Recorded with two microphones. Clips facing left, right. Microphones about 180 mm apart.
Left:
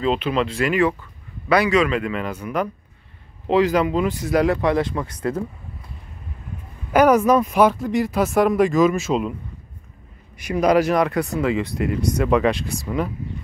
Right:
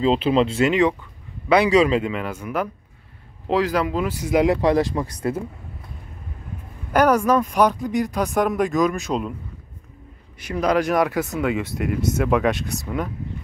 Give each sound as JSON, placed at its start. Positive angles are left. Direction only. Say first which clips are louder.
{"t": 0.0, "sound": "speech", "louder": "right 3 dB", "side_deg": -25}
{"t": 2.1, "sound": "speech", "louder": "left 1 dB", "side_deg": -10}
{"t": 6.9, "sound": "speech", "louder": "left 2 dB", "side_deg": 5}
{"t": 10.4, "sound": "a man's voice", "louder": "left 3 dB", "side_deg": 10}
{"t": 10.9, "sound": "speech", "louder": "left 1 dB", "side_deg": 0}